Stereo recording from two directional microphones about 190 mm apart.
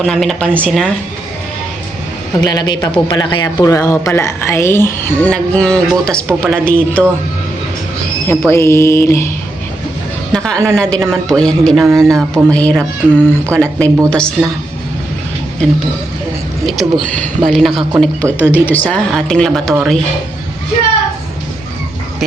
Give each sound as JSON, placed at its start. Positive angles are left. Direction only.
{"t": 0.0, "sound": "a man's voice", "side_deg": 0}
{"t": 2.4, "sound": "speech", "side_deg": 20}
{"t": 8.3, "sound": "speech", "side_deg": 15}
{"t": 10.3, "sound": "a man's voice", "side_deg": 5}
{"t": 11.9, "sound": "speech", "side_deg": -15}
{"t": 12.3, "sound": "speech", "side_deg": 5}
{"t": 14.4, "sound": "speech", "side_deg": -5}
{"t": 17.4, "sound": "a man's voice", "side_deg": 0}